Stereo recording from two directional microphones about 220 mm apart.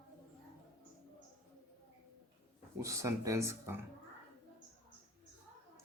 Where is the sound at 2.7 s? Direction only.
15° right (ahead or behind).